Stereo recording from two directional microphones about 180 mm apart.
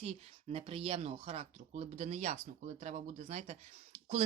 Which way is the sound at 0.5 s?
35° right (ahead or behind).